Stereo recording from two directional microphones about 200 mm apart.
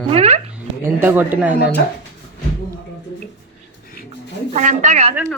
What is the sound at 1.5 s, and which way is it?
Speech, 55° left (ahead or behind).